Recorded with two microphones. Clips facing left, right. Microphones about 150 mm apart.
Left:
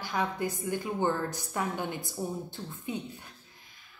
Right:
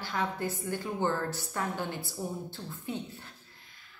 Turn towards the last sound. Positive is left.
turn(degrees=15)  # may be behind; listen again after turning